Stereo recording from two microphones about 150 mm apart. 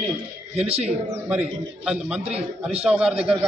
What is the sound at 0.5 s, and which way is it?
Speech, 45° right (ahead or behind).